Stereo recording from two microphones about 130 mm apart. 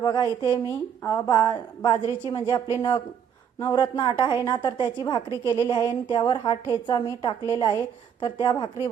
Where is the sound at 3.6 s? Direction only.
35° left (ahead or behind).